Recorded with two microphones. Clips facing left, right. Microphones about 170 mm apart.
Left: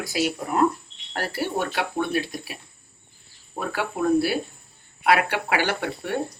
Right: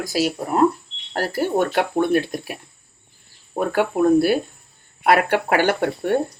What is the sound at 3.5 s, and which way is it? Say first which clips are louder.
Speech: right 8 dB; 50° right (ahead or behind).